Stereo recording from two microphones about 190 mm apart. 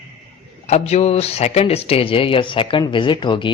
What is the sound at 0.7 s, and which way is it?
Speech, 35° left (ahead or behind).